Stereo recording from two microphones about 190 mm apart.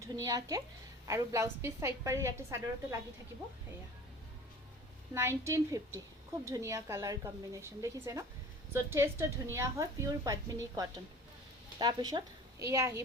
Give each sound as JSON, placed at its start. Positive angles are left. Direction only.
{"t": 0.2, "sound": "a woman's voice", "side_deg": -20}
{"t": 5.1, "sound": "a woman's voice", "side_deg": -15}